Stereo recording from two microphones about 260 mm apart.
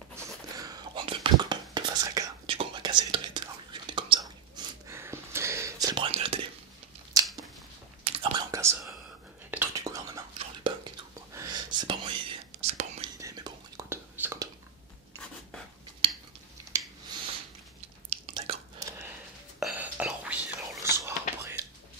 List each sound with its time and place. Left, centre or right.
0.1 s whispering: centre
8.0 s whispering: centre
13.2 s whispering: centre
18.1 s whispering: right; by 20.8 s centre
20.9 s whispering: centre